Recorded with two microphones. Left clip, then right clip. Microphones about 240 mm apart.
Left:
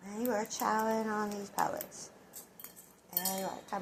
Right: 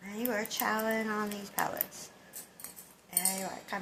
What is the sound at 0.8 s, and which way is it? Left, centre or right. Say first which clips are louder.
Cutlery: right 1 dB; right.